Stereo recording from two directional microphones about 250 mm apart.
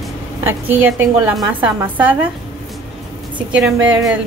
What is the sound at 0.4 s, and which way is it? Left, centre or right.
A woman's voice, centre.